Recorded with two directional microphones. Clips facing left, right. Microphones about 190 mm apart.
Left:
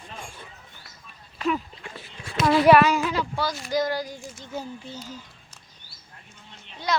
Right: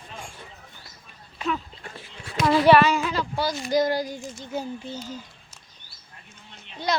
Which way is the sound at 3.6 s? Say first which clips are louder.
Right 4 dB; 15° right (ahead or behind).